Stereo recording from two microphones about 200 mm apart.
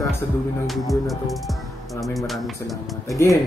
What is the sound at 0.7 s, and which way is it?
Speech, centre (ahead or behind).